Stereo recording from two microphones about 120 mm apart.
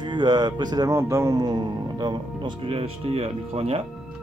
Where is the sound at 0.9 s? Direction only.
25° right (ahead or behind); by 3.8 s 55° right (ahead or behind).